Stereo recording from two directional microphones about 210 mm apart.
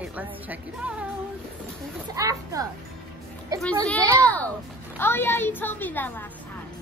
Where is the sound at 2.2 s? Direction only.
15° right (ahead or behind).